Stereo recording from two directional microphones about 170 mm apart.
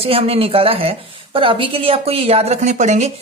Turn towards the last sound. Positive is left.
turn(degrees=-45)  # may be behind; listen again after turning